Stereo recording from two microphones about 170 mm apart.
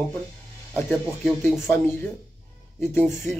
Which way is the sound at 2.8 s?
15° left (ahead or behind).